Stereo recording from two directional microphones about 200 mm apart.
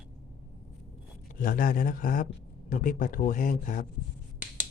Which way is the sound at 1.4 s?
45° left (ahead or behind).